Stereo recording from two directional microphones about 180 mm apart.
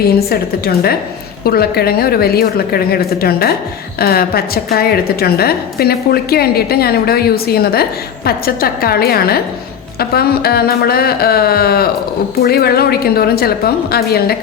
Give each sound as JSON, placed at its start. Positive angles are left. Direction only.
{"t": 0.0, "sound": "a woman's voice", "side_deg": 60}